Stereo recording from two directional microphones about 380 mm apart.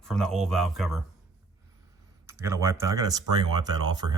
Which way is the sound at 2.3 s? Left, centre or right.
Centre.